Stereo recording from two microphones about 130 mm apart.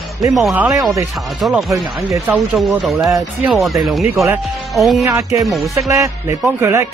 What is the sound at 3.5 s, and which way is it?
Speech, centre (ahead or behind).